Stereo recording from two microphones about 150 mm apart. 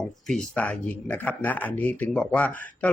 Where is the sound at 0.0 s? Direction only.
5° left (ahead or behind).